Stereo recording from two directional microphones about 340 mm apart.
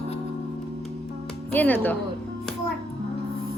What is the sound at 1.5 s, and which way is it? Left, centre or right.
Speech, centre.